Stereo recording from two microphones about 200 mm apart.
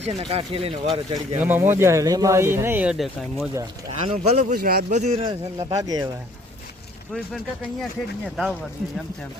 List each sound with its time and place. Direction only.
0.0 s a man's voice: 30° right (ahead or behind)
1.4 s speech: 10° right (ahead or behind)
3.5 s speech: 15° right (ahead or behind)
4.2 s speech: 35° right (ahead or behind)
4.9 s a man's voice: 35° right (ahead or behind); by 6.1 s 20° right (ahead or behind)
7.1 s speech: centre (ahead or behind)